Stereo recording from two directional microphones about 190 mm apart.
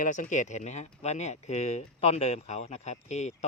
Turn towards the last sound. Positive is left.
turn(degrees=35)  # may be behind; listen again after turning